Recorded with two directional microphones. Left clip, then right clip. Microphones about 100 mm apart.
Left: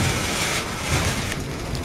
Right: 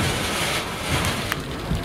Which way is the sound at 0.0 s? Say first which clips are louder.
Even; 40° right (ahead or behind).